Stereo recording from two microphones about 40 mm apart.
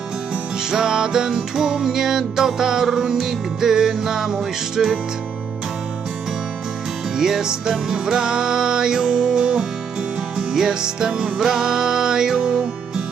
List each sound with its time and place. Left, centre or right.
0.7 s music: centre
7.2 s music: centre